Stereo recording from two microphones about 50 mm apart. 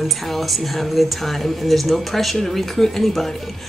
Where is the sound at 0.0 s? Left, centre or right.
Centre.